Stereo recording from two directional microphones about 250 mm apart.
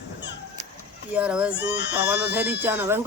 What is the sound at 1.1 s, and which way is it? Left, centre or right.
Speech, centre.